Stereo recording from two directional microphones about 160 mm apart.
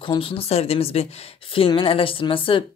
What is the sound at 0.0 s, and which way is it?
Speech, 35° left (ahead or behind).